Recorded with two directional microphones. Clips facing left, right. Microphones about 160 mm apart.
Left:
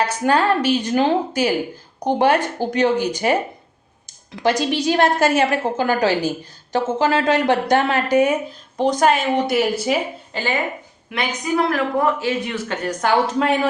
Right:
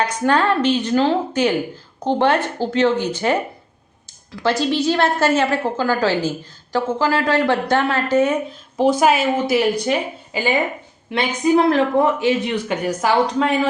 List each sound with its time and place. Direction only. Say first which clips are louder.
0.0 s a woman's voice: even; 10° left (ahead or behind)
8.4 s a woman's voice: right 3 dB; 5° right (ahead or behind)
10.3 s speech: right 3 dB; 10° right (ahead or behind)
11.1 s speech: right 6 dB; 30° right (ahead or behind); by 13.6 s centre (ahead or behind)